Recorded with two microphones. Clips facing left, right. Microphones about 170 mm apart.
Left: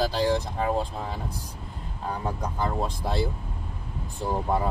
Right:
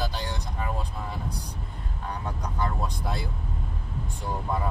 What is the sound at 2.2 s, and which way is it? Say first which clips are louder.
Speech: left 2 dB; 30° left (ahead or behind).